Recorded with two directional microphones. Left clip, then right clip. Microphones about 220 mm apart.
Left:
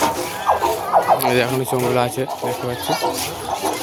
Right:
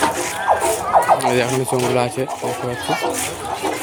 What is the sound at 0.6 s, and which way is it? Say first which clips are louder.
Speech: right 1 dB; centre (ahead or behind).